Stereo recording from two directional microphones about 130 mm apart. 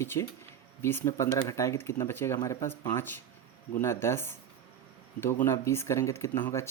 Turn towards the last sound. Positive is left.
turn(degrees=20)  # may be behind; listen again after turning